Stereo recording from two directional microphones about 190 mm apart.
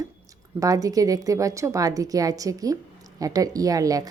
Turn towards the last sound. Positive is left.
turn(degrees=-20)  # may be behind; listen again after turning